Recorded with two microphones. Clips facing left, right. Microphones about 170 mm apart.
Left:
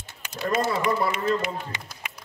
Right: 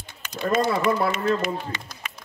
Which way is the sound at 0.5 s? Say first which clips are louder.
Right 3 dB; 10° left (ahead or behind).